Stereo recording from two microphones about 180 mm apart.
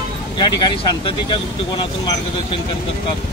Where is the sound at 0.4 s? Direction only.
25° left (ahead or behind).